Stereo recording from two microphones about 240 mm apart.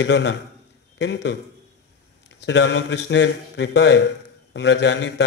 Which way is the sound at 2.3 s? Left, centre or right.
Left.